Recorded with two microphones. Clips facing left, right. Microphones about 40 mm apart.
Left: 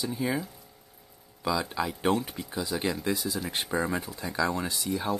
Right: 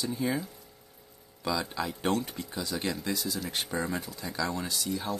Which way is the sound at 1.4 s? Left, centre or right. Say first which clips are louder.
Left 3 dB; centre.